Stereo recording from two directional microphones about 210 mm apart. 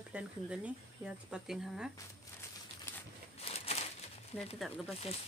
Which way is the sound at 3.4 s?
30° left (ahead or behind).